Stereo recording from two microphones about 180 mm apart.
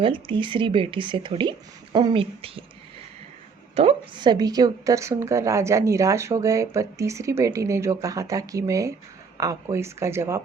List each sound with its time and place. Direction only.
0.0 s speech: 25° right (ahead or behind)
3.8 s speech: 30° right (ahead or behind); by 10.4 s 15° right (ahead or behind)